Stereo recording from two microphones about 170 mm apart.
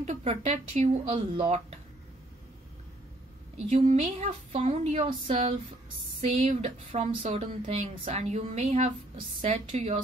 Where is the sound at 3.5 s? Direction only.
40° right (ahead or behind).